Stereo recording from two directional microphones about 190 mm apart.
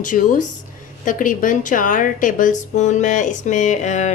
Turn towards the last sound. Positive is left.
turn(degrees=40)  # may be behind; listen again after turning